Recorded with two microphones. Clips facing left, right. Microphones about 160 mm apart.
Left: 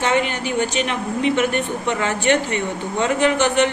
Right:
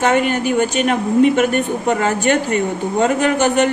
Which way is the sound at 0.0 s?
45° right (ahead or behind).